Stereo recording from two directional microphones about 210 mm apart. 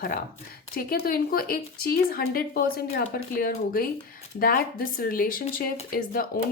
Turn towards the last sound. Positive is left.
turn(degrees=45)  # may be behind; listen again after turning